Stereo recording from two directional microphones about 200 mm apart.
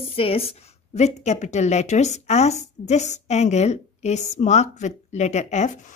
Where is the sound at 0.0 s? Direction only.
30° left (ahead or behind).